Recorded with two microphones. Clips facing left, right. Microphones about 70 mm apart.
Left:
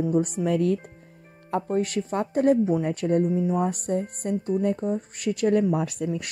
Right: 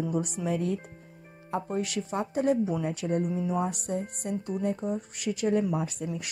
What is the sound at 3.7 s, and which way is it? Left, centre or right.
A woman's voice, left.